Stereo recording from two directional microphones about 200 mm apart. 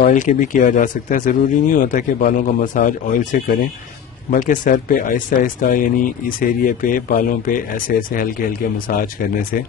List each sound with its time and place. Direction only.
0.0 s speech: 35° left (ahead or behind)